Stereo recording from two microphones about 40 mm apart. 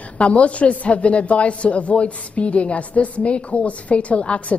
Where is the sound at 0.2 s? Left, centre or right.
Left.